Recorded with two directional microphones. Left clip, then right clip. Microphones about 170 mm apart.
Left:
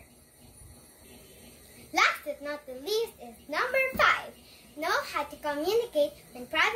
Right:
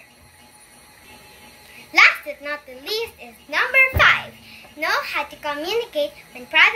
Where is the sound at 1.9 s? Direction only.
30° left (ahead or behind).